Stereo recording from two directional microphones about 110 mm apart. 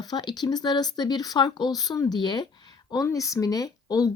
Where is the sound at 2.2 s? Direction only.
45° left (ahead or behind).